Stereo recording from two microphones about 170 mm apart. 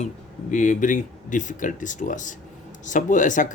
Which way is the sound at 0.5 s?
50° left (ahead or behind).